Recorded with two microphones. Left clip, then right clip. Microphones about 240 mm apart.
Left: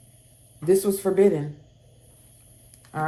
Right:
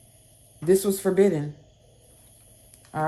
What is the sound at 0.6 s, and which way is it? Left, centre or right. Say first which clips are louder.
Speech: left 1 dB; right.